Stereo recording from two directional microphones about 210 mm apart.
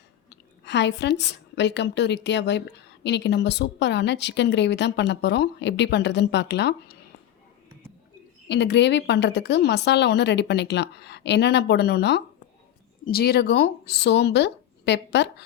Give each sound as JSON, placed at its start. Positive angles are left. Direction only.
{"t": 0.3, "sound": "a woman's voice", "side_deg": 55}
{"t": 8.4, "sound": "a woman's voice", "side_deg": 55}